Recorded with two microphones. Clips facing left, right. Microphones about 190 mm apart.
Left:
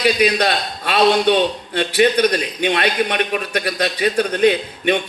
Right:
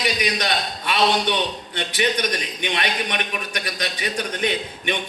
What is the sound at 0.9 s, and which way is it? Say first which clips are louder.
A man's voice: left 6 dB; 65° left (ahead or behind).